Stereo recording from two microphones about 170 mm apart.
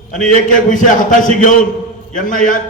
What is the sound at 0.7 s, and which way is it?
A man's voice, 50° left (ahead or behind).